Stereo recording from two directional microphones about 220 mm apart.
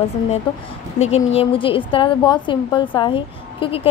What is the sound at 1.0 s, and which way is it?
A woman's voice, 30° left (ahead or behind).